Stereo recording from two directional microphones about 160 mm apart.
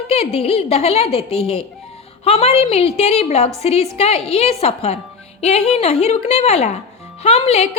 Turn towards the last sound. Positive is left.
turn(degrees=40)  # may be behind; listen again after turning